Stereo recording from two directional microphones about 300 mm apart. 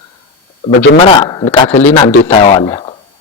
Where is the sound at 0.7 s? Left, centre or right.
Centre.